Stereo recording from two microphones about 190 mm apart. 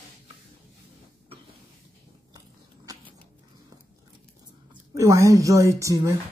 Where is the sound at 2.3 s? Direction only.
20° right (ahead or behind).